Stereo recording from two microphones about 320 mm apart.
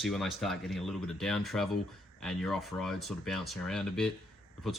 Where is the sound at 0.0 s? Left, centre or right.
Centre.